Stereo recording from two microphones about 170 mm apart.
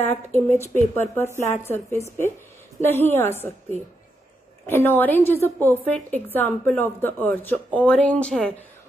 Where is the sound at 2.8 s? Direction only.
15° left (ahead or behind).